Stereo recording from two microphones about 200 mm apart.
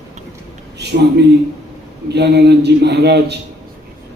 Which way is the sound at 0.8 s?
55° right (ahead or behind).